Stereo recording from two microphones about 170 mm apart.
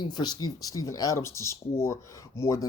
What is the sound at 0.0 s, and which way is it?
Speech, 25° left (ahead or behind).